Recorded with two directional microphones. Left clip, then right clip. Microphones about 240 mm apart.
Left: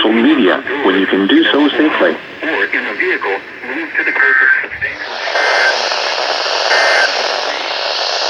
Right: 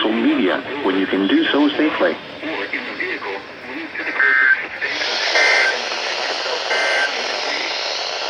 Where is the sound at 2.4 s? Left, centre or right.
Left.